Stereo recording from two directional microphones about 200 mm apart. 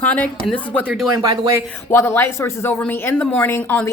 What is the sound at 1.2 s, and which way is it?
Speech, 20° right (ahead or behind).